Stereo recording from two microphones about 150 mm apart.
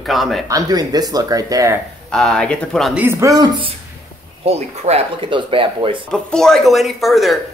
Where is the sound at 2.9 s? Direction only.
15° right (ahead or behind).